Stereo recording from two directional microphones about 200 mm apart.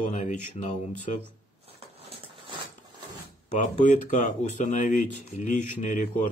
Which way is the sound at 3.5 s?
35° left (ahead or behind).